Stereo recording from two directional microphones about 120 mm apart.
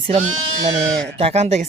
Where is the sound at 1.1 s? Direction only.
60° right (ahead or behind).